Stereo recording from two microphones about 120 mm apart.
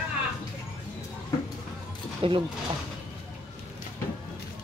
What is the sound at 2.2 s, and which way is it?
Speech, 50° right (ahead or behind).